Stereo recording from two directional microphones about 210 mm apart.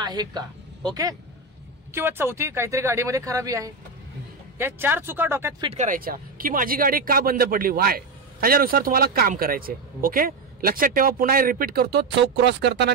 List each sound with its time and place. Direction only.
0.0 s speech: 20° right (ahead or behind)
2.0 s speech: 10° right (ahead or behind)
5.7 s speech: 35° right (ahead or behind); by 12.9 s 55° right (ahead or behind)